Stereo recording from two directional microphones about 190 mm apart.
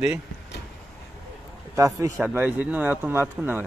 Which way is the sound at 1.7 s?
15° right (ahead or behind).